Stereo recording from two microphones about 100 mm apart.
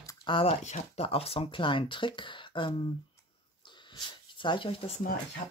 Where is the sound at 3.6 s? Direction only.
50° left (ahead or behind).